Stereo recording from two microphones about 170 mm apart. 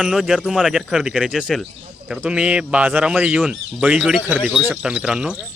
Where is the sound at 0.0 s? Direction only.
5° right (ahead or behind).